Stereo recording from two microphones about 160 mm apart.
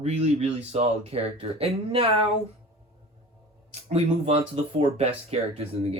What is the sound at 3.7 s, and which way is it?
Speech, 40° right (ahead or behind).